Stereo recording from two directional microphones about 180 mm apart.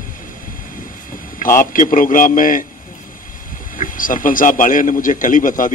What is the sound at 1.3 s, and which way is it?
A man's voice, 50° left (ahead or behind).